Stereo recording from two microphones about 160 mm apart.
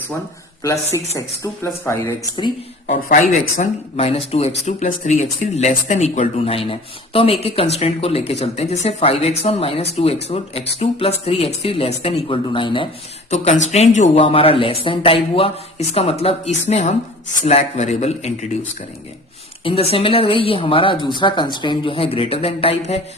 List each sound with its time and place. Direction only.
0.6 s speech: 20° left (ahead or behind)
2.8 s speech: 50° left (ahead or behind); by 12.9 s 35° left (ahead or behind)
13.3 s speech: 45° left (ahead or behind)
14.3 s speech: 35° left (ahead or behind)
19.6 s speech: 35° left (ahead or behind)